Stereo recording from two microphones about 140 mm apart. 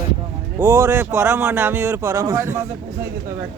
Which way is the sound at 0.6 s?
15° right (ahead or behind).